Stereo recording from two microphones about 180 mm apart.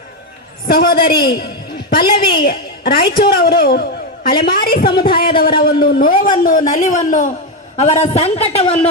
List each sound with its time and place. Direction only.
0.7 s a woman's voice: 55° left (ahead or behind)
6.7 s a man's voice: 40° left (ahead or behind)